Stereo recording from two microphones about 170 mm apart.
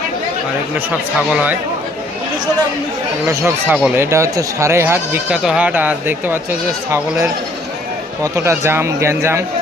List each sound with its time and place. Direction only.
1.3 s speech: 10° right (ahead or behind)
3.2 s speech: 15° right (ahead or behind)